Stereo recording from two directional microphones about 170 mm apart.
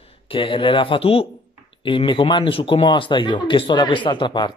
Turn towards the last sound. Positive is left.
turn(degrees=25)  # may be behind; listen again after turning